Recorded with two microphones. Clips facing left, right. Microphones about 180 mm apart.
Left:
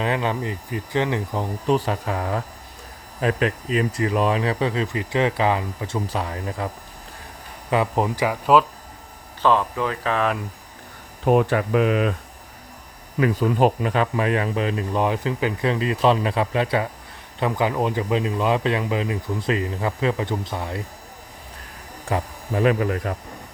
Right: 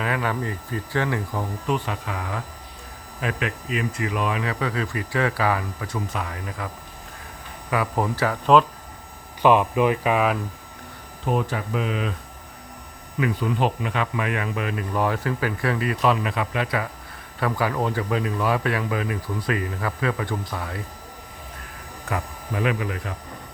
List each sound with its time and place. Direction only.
0.0 s speech: 25° left (ahead or behind)
1.6 s speech: 35° left (ahead or behind)
7.7 s speech: 25° left (ahead or behind)
9.4 s speech: 15° right (ahead or behind)
11.3 s speech: 65° left (ahead or behind)
13.1 s speech: 40° left (ahead or behind); by 20.8 s 25° left (ahead or behind)
22.1 s speech: 30° left (ahead or behind)
22.5 s speech: 40° left (ahead or behind)